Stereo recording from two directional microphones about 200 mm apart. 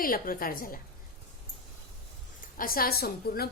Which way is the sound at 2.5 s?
45° left (ahead or behind).